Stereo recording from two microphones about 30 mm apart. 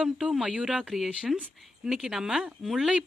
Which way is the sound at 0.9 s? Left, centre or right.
Centre.